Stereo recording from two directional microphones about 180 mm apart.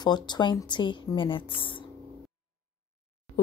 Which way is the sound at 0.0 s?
25° left (ahead or behind).